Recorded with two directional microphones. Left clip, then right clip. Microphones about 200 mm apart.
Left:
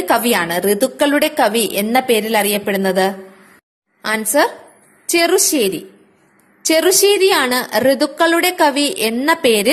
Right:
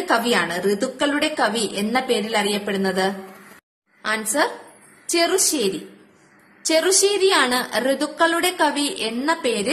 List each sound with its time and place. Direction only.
0.0 s a woman's voice: 35° left (ahead or behind)